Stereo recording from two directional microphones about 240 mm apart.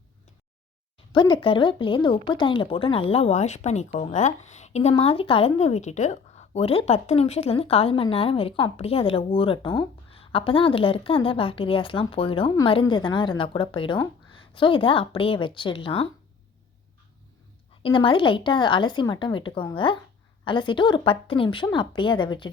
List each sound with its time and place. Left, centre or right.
1.1 s speech: centre
17.8 s speech: left